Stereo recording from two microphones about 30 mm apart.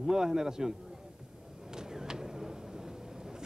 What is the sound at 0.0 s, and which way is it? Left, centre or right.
Speech, centre.